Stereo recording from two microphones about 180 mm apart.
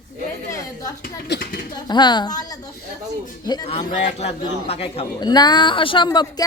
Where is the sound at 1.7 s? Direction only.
25° left (ahead or behind).